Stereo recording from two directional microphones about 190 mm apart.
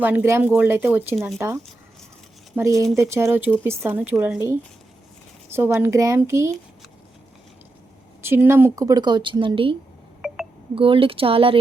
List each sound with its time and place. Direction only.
0.0 s speech: 10° right (ahead or behind)
5.5 s speech: 10° right (ahead or behind)
8.2 s speech: 10° right (ahead or behind); by 9.7 s 25° right (ahead or behind)
10.2 s telephone dialing: centre (ahead or behind)
10.8 s speech: 30° right (ahead or behind)